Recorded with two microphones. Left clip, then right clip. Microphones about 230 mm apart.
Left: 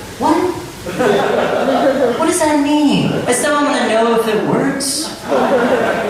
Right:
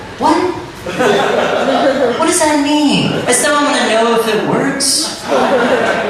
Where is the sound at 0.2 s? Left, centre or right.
Centre.